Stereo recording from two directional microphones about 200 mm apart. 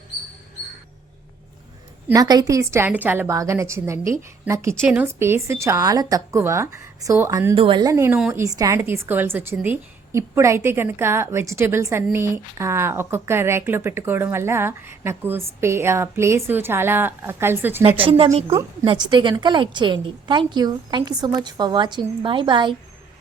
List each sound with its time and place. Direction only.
2.0 s speech: 20° right (ahead or behind)
17.8 s a woman's voice: 30° right (ahead or behind)
18.5 s a woman's voice: 20° right (ahead or behind)